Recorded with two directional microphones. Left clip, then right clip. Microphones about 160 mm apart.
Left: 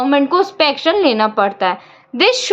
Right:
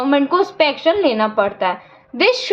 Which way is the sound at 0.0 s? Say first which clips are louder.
Left 2 dB; 20° left (ahead or behind).